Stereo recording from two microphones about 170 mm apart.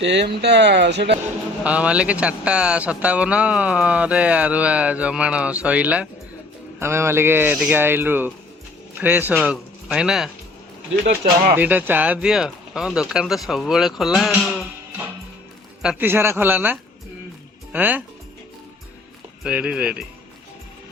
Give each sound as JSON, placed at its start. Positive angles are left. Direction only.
{"t": 0.0, "sound": "speech", "side_deg": -90}
{"t": 1.6, "sound": "speech", "side_deg": -5}
{"t": 11.5, "sound": "speech", "side_deg": -10}
{"t": 15.8, "sound": "speech", "side_deg": -10}
{"t": 19.4, "sound": "speech", "side_deg": -5}